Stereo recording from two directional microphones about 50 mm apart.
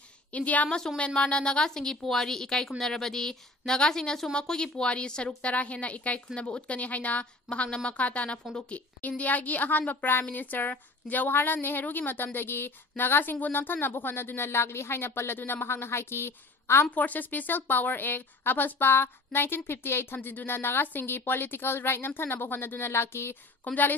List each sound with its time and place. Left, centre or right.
0.3 s a woman's voice: left
0.7 s a woman's voice: centre; by 16.8 s left
16.9 s a woman's voice: left
23.6 s a woman's voice: left